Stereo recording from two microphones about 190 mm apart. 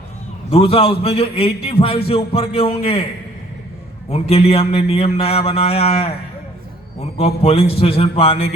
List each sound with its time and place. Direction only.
0.5 s a man's voice: 30° left (ahead or behind)
4.1 s a man's voice: 30° left (ahead or behind)